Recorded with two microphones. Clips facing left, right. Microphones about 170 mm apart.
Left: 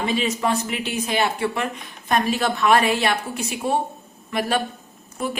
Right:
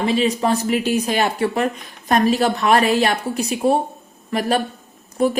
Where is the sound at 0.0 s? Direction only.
35° right (ahead or behind).